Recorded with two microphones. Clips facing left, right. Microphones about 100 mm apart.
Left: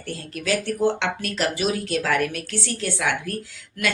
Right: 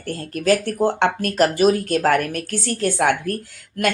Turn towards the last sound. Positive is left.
turn(degrees=-45)  # may be behind; listen again after turning